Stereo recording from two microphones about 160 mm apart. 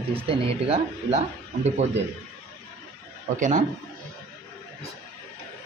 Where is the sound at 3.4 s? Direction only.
50° right (ahead or behind).